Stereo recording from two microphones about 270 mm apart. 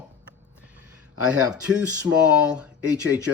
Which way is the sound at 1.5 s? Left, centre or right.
Centre.